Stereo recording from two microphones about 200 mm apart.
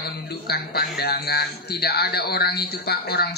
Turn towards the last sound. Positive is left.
turn(degrees=55)  # may be behind; listen again after turning